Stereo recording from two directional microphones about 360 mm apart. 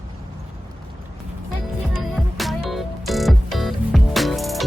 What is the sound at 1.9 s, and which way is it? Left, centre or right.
Music, centre.